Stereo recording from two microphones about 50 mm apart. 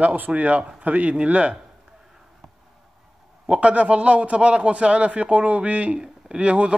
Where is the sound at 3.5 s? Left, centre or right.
Right.